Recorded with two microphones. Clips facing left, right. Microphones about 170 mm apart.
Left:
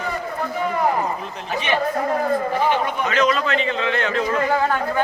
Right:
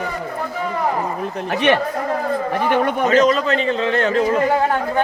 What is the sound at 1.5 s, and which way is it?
Speech, 65° right (ahead or behind).